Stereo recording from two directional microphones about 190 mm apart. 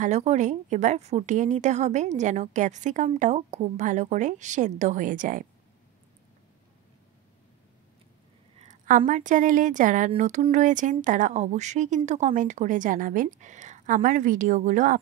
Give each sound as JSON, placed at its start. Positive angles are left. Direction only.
{"t": 0.0, "sound": "a woman's voice", "side_deg": -35}
{"t": 8.5, "sound": "a woman's voice", "side_deg": -40}